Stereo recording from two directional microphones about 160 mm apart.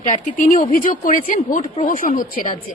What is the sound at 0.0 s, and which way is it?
Speech, 55° left (ahead or behind).